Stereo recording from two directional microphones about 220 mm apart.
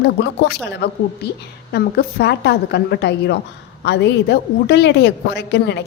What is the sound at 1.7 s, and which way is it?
A woman's voice, 45° left (ahead or behind).